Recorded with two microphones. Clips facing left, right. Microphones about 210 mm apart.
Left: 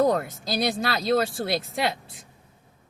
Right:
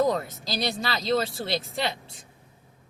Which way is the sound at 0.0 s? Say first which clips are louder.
Left 2 dB; 55° left (ahead or behind).